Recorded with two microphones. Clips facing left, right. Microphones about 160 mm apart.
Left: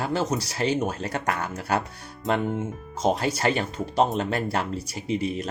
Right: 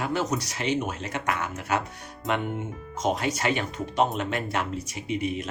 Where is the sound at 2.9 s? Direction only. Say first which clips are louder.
Left 2 dB; 30° left (ahead or behind).